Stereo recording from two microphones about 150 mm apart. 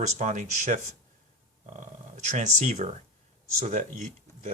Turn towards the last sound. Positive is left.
turn(degrees=-50)  # may be behind; listen again after turning